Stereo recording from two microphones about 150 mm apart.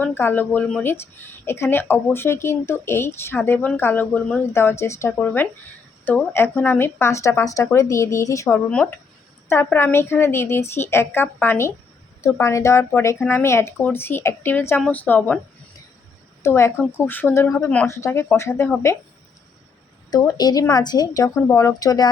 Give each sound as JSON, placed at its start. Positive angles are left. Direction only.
{"t": 0.0, "sound": "speech", "side_deg": 15}
{"t": 16.4, "sound": "speech", "side_deg": 20}
{"t": 20.1, "sound": "speech", "side_deg": 25}